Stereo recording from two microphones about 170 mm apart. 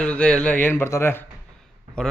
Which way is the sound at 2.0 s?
5° left (ahead or behind).